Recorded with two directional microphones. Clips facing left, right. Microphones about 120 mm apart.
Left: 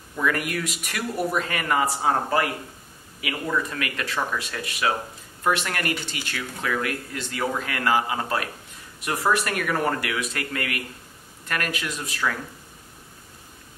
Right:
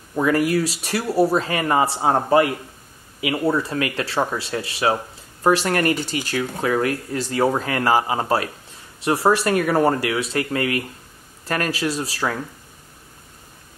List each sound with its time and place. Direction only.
0.1 s speech: 30° right (ahead or behind)